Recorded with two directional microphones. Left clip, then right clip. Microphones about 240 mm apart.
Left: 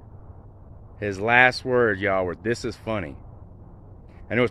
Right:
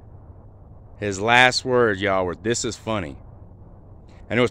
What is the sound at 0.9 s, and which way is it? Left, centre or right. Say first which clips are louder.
Speech: right 2 dB; right.